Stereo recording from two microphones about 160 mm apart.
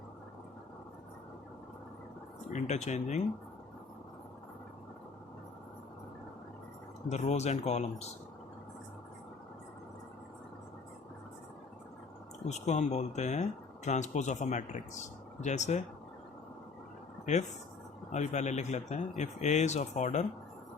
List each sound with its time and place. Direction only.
2.5 s speech: 45° left (ahead or behind)
7.1 s speech: 45° left (ahead or behind)
12.5 s speech: 45° left (ahead or behind)
17.3 s speech: 50° left (ahead or behind)